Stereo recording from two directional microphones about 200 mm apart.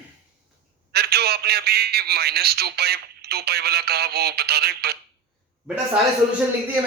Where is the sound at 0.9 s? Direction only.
50° right (ahead or behind).